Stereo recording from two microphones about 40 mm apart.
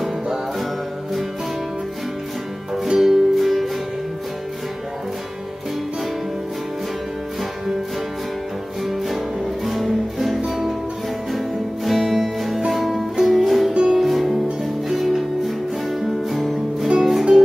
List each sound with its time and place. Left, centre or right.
0.0 s music: centre
3.0 s music: centre
8.8 s music: centre
13.7 s music: right
14.0 s music: centre